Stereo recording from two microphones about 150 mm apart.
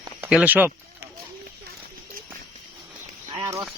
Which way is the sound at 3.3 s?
25° right (ahead or behind).